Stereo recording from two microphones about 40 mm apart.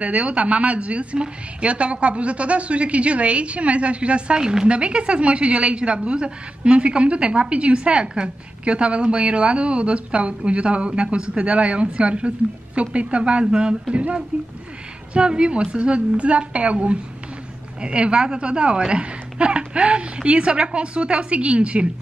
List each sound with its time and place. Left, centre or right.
0.0 s a woman's voice: right
4.4 s a woman's voice: right